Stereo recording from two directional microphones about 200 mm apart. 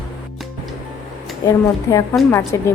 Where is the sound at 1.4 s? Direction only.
15° left (ahead or behind).